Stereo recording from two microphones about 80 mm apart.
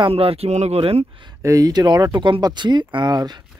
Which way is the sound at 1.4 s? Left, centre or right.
Right.